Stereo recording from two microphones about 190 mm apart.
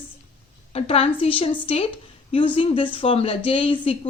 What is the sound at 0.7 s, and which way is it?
A woman's voice, 30° left (ahead or behind).